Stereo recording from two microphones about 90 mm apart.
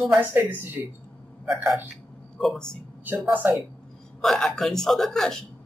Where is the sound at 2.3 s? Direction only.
5° left (ahead or behind).